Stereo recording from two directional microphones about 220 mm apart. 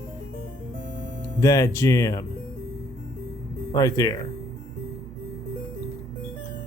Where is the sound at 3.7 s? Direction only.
15° left (ahead or behind).